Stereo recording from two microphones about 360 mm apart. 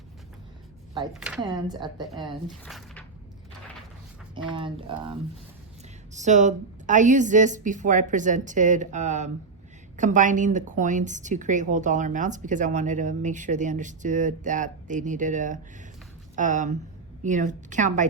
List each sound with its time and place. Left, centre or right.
1.1 s speech: centre
2.5 s speech: centre
4.5 s speech: centre
6.1 s a woman's voice: centre